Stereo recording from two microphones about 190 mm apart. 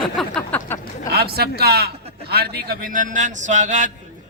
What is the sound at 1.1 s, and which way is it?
A man's voice, 55° right (ahead or behind).